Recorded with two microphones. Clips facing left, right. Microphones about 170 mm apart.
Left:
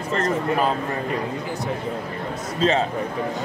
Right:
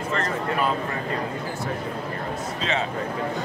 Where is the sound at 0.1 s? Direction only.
40° left (ahead or behind).